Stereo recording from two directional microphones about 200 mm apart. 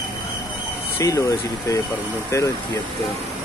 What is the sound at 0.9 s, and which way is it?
Speech, 15° left (ahead or behind).